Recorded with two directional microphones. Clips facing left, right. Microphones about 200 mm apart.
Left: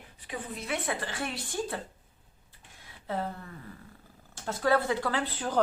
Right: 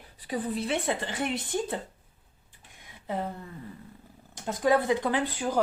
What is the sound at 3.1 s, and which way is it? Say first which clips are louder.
Speech: right 1 dB; 15° right (ahead or behind).